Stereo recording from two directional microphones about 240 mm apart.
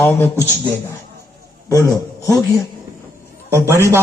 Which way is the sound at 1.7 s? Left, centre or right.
Centre.